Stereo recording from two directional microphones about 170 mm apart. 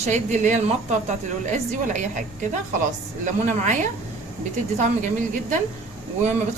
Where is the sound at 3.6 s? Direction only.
50° right (ahead or behind).